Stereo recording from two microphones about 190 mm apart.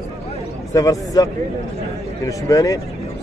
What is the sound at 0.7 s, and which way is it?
Speech, 20° left (ahead or behind).